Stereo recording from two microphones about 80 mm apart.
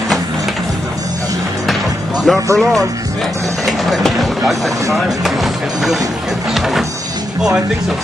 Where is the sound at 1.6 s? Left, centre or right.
Centre.